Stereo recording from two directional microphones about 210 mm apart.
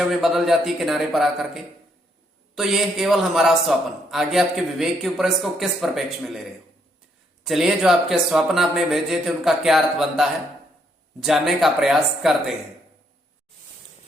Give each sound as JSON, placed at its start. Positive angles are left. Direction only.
{"t": 0.0, "sound": "a man's voice", "side_deg": 0}